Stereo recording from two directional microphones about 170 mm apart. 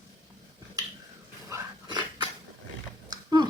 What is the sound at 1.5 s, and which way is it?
Dog, 25° right (ahead or behind).